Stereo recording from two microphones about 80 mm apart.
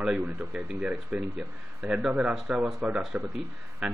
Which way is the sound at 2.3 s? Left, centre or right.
Centre.